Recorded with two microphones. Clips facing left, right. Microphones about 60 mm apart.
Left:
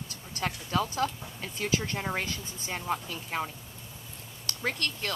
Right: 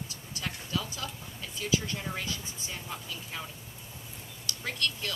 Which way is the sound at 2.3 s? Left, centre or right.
Left.